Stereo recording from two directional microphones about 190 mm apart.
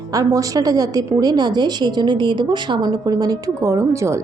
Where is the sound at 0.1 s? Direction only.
20° right (ahead or behind).